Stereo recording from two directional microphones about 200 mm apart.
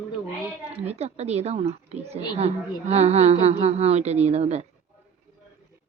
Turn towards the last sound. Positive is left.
turn(degrees=-35)  # may be behind; listen again after turning